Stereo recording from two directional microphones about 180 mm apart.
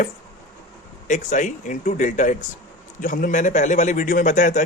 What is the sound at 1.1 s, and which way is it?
Speech, 45° left (ahead or behind).